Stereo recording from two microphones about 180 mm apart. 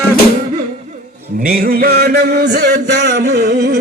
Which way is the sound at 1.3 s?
55° right (ahead or behind).